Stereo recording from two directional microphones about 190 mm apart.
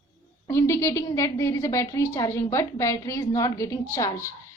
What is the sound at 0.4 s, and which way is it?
A woman's voice, 15° left (ahead or behind).